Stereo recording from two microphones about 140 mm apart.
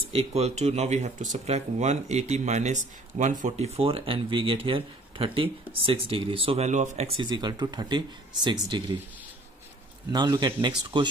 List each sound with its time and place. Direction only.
0.1 s speech: 50° right (ahead or behind)
7.2 s speech: 30° right (ahead or behind)
10.1 s a man's voice: 30° right (ahead or behind)